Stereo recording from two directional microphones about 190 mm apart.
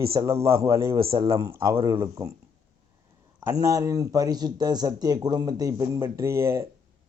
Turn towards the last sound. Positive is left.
turn(degrees=-15)  # may be behind; listen again after turning